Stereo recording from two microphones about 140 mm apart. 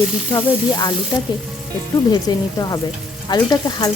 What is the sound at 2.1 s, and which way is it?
A woman's voice, 25° left (ahead or behind).